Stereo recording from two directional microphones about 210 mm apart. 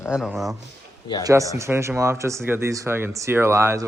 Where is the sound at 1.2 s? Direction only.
15° right (ahead or behind).